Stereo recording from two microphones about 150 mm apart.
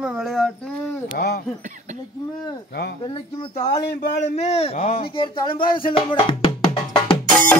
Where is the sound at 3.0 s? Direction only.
35° left (ahead or behind).